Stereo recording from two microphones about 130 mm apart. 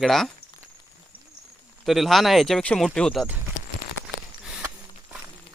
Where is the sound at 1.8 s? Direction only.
Centre (ahead or behind).